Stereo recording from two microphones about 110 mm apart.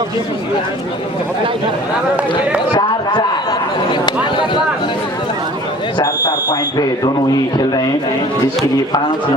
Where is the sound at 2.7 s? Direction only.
40° left (ahead or behind).